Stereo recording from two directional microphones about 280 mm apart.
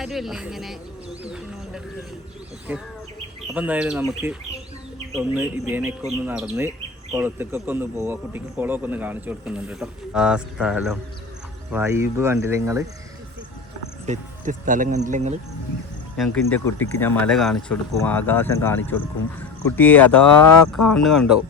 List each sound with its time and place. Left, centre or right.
0.0 s speech: centre
14.1 s speech: right
16.1 s speech: centre